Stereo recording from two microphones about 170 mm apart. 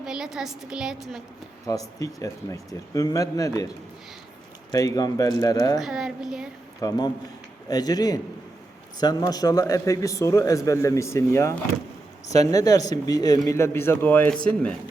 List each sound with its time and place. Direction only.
0.0 s a woman's voice: 5° right (ahead or behind)
1.6 s a man's voice: 20° left (ahead or behind)
4.7 s a man's voice: 20° left (ahead or behind)
5.8 s a woman's voice: 5° right (ahead or behind)
6.7 s a man's voice: 25° left (ahead or behind); by 14.8 s 5° left (ahead or behind)